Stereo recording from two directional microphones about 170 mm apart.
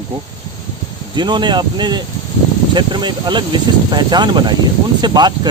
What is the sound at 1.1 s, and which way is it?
Speech, 25° right (ahead or behind).